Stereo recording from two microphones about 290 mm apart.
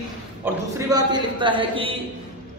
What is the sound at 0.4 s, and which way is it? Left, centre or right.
A man's voice, centre.